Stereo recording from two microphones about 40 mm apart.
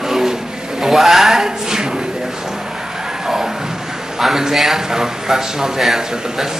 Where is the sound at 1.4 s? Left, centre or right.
Centre.